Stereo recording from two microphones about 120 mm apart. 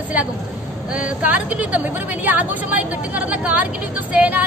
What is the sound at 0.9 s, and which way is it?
Speech, 10° right (ahead or behind).